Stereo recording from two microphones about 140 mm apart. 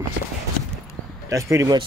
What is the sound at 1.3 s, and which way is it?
Speech, 20° right (ahead or behind).